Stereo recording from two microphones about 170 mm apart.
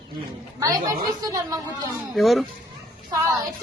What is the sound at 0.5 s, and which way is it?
Speech, 20° right (ahead or behind).